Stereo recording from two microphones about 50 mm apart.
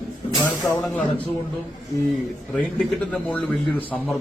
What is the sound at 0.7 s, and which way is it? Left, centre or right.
Speech, left.